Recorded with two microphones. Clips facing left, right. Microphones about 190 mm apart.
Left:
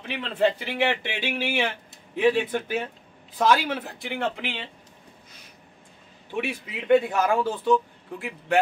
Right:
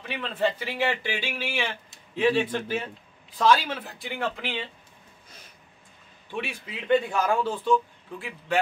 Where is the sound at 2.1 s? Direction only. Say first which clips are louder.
Left 2 dB; 10° left (ahead or behind).